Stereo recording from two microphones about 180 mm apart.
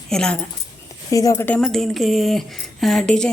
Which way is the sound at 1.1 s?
15° left (ahead or behind).